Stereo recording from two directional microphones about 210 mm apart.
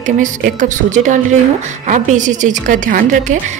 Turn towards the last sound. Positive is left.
turn(degrees=-40)  # may be behind; listen again after turning